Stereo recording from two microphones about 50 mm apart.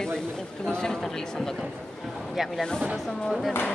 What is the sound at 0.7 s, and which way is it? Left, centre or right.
Speech, centre.